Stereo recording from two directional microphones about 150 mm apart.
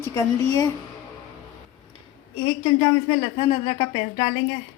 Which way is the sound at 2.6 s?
30° left (ahead or behind).